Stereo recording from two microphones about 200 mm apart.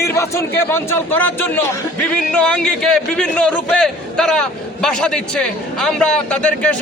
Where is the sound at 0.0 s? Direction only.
15° left (ahead or behind).